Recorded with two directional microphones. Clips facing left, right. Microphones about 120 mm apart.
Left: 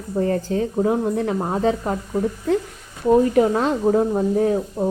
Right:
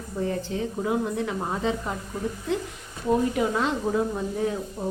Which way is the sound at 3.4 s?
45° left (ahead or behind).